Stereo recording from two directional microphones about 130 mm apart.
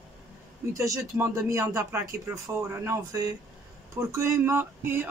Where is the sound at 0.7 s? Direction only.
20° right (ahead or behind).